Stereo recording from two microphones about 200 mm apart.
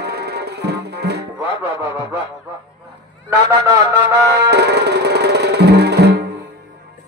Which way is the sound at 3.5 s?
15° right (ahead or behind).